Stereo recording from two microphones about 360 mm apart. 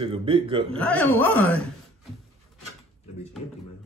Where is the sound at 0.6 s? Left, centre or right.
Centre.